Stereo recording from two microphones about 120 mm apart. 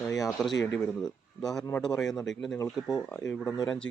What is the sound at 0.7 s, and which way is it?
Speech, 5° left (ahead or behind).